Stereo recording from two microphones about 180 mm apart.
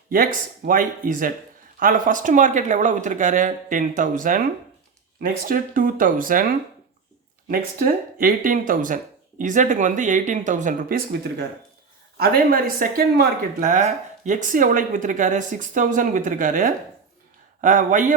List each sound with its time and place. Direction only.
0.1 s speech: 50° right (ahead or behind)
7.4 s speech: 55° right (ahead or behind)